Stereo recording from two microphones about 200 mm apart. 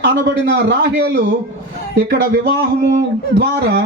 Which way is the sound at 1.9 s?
55° right (ahead or behind).